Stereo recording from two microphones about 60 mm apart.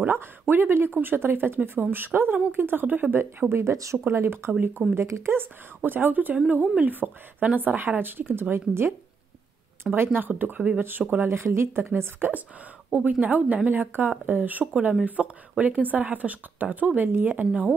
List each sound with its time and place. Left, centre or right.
0.0 s speech: right
3.7 s speech: right
4.1 s a woman's voice: right
9.9 s speech: right
11.2 s a woman's voice: right
15.2 s speech: centre
15.6 s a woman's voice: right